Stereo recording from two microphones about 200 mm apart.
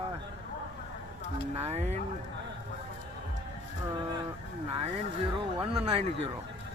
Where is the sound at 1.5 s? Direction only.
30° right (ahead or behind).